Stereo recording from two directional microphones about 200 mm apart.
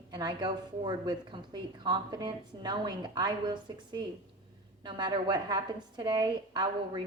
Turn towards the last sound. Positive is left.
turn(degrees=-20)  # may be behind; listen again after turning